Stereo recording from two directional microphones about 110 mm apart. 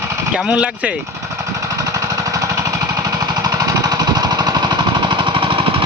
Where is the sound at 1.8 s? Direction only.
30° right (ahead or behind).